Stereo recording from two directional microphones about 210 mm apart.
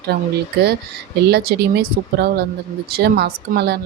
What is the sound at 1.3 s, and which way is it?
Speech, 50° right (ahead or behind).